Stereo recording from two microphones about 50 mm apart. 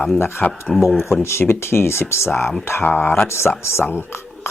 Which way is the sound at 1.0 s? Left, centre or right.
Left.